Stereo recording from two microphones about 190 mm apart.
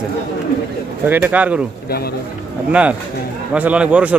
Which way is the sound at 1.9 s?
55° left (ahead or behind).